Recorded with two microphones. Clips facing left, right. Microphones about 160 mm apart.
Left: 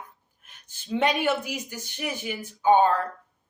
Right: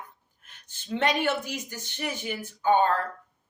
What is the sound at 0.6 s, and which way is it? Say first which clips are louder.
Speech: left 2 dB; 10° left (ahead or behind).